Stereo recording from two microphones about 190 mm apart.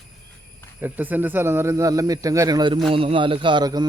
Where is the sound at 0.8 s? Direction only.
10° right (ahead or behind).